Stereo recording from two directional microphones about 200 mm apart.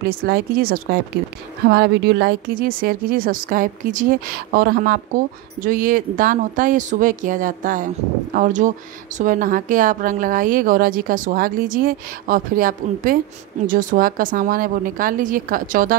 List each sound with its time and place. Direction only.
0.0 s a woman's voice: 50° right (ahead or behind)